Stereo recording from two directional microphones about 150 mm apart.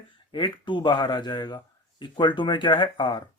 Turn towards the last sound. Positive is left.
turn(degrees=30)  # may be behind; listen again after turning